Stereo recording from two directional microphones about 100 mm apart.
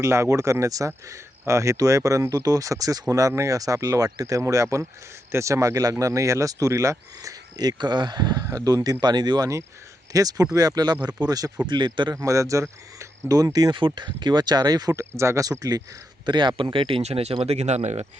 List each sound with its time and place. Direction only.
0.0 s speech: 30° right (ahead or behind)
16.2 s speech: 50° right (ahead or behind); by 18.0 s 90° right